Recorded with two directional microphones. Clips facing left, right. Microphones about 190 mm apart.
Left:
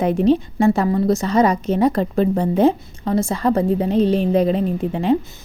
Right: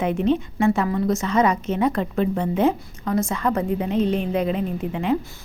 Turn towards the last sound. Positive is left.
turn(degrees=35)  # may be behind; listen again after turning